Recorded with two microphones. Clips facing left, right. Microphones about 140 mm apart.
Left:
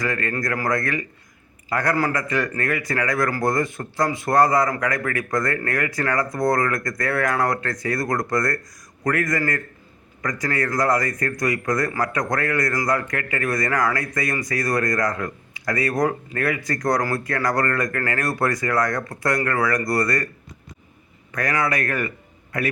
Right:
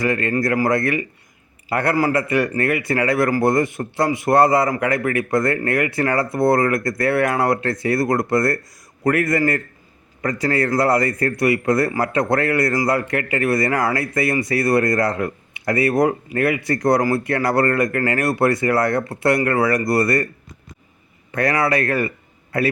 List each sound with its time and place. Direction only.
0.0 s speech: 20° right (ahead or behind)
21.3 s a man's voice: 30° right (ahead or behind)